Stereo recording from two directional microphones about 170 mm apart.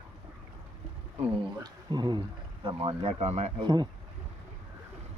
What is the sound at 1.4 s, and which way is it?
Speech, 25° right (ahead or behind).